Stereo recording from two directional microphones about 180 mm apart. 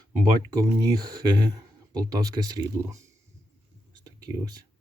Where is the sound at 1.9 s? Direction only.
20° right (ahead or behind).